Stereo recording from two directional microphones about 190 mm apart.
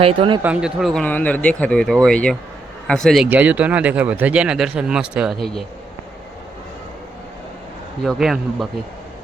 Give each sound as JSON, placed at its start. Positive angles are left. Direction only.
{"t": 0.0, "sound": "speech", "side_deg": -30}
{"t": 0.4, "sound": "speech", "side_deg": -5}
{"t": 8.0, "sound": "speech", "side_deg": 0}